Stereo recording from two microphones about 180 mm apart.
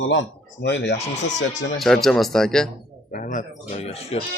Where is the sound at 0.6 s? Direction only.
70° left (ahead or behind); by 1.7 s 90° left.